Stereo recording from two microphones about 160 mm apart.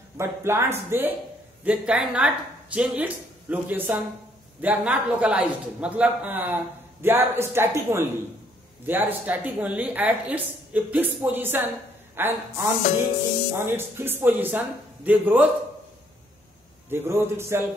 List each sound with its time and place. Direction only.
0.2 s a man's voice: 15° right (ahead or behind)
16.9 s a man's voice: 15° right (ahead or behind)